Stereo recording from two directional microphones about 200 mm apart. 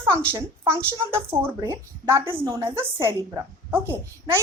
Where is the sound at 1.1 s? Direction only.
10° right (ahead or behind).